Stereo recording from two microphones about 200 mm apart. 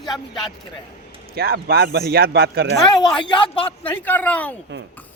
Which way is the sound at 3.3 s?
25° left (ahead or behind).